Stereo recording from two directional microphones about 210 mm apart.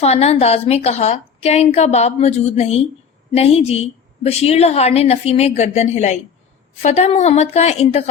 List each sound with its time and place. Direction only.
0.0 s a woman's voice: 30° left (ahead or behind)